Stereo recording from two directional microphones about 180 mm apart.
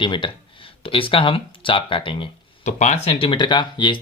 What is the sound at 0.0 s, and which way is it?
Speech, 25° left (ahead or behind).